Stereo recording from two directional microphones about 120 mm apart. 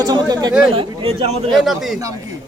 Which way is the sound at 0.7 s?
50° right (ahead or behind).